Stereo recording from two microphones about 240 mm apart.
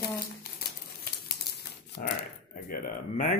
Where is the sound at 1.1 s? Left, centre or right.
Left.